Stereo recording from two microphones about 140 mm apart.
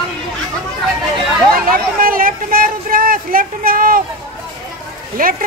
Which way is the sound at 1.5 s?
90° right.